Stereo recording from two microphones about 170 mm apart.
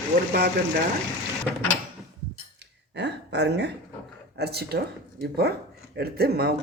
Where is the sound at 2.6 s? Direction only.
90° right.